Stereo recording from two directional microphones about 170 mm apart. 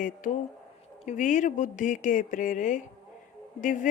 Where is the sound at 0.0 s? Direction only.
50° left (ahead or behind).